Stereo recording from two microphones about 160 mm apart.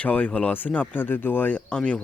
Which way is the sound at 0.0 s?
10° left (ahead or behind).